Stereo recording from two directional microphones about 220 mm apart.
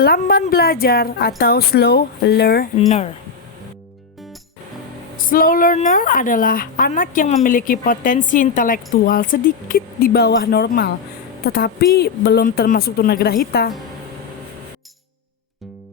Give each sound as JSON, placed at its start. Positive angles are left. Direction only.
{"t": 0.0, "sound": "a woman's voice", "side_deg": 45}
{"t": 5.1, "sound": "a woman's voice", "side_deg": 40}